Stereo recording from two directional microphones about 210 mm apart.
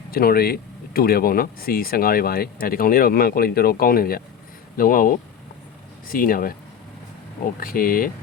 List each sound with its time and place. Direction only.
0.1 s speech: 45° left (ahead or behind)